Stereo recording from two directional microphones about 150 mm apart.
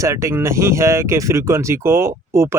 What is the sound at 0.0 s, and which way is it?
Speech, 20° right (ahead or behind).